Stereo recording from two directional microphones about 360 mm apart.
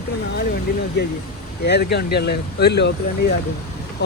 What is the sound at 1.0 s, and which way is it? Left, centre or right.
Speech, left.